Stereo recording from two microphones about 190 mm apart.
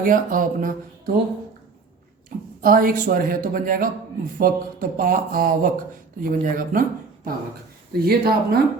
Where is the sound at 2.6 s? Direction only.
50° right (ahead or behind).